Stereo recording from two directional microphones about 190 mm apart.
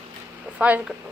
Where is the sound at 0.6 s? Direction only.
5° right (ahead or behind).